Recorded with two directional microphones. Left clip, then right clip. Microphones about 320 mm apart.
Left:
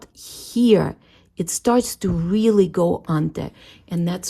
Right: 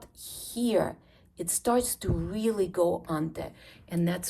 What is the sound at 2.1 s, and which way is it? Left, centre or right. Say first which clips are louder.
Speech: left 12 dB; left.